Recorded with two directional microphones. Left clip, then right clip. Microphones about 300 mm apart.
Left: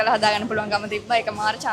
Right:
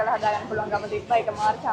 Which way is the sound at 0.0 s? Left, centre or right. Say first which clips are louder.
Left 4 dB; left.